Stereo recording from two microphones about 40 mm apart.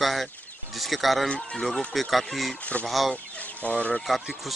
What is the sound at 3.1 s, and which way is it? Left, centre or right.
Chicken, left.